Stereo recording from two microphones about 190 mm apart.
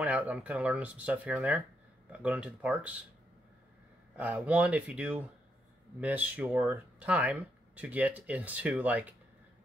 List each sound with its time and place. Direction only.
0.0 s speech: 10° right (ahead or behind)
4.2 s speech: 10° right (ahead or behind)